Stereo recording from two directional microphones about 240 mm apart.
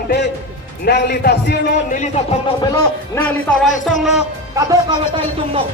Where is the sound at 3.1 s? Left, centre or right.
Centre.